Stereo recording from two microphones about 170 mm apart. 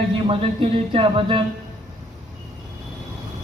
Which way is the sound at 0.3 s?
30° right (ahead or behind).